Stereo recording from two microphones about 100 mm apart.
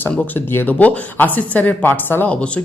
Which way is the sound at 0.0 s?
20° left (ahead or behind).